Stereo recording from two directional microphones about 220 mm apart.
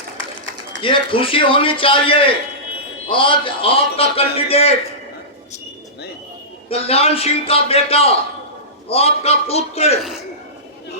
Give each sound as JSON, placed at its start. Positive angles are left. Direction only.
{"t": 0.8, "sound": "a man's voice", "side_deg": 25}
{"t": 6.7, "sound": "a man's voice", "side_deg": 25}